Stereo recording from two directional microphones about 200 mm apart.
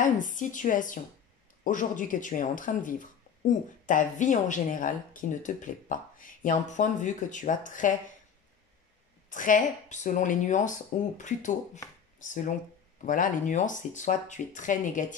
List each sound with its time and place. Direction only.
0.0 s speech: 40° left (ahead or behind)
9.3 s speech: 40° left (ahead or behind)